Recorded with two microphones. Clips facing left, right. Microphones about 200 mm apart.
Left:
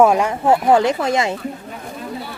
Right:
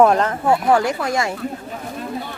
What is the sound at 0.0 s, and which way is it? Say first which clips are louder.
Speech: left 1 dB; 10° left (ahead or behind).